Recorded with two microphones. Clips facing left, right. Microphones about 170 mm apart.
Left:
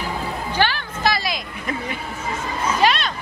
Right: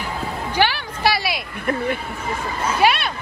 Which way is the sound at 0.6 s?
10° right (ahead or behind).